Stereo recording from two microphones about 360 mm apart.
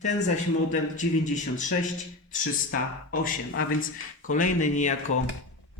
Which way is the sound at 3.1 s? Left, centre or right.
Left.